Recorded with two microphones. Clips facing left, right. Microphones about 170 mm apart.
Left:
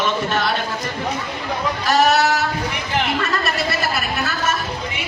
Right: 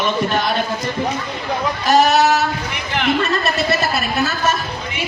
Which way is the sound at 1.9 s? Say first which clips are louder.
Right 3 dB; 20° right (ahead or behind).